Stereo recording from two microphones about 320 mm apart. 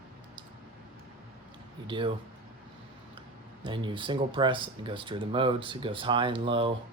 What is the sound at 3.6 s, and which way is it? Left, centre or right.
Speech, centre.